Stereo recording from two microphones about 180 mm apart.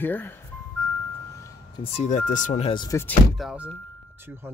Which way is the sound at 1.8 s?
35° left (ahead or behind).